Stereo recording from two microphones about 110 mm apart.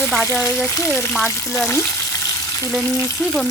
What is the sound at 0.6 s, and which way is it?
Speech, 25° left (ahead or behind).